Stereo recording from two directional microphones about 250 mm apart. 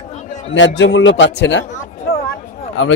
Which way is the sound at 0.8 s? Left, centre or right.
Left.